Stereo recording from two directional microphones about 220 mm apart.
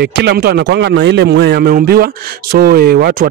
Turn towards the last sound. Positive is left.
turn(degrees=-45)  # may be behind; listen again after turning